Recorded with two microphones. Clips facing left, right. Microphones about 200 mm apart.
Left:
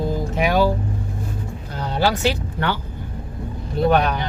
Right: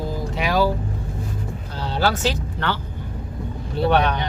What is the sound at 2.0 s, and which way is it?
Speech, 15° left (ahead or behind).